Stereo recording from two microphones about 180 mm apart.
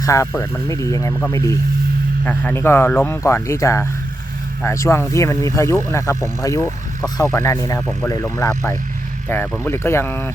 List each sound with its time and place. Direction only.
0.0 s speech: 15° left (ahead or behind)